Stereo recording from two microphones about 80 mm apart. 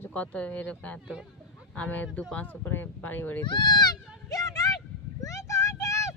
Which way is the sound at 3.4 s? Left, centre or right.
Left.